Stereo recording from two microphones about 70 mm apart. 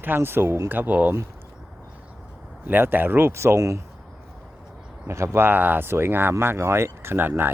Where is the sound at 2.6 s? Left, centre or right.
Right.